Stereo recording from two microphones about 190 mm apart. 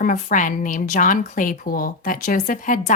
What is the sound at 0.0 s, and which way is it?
A woman's voice, 45° left (ahead or behind).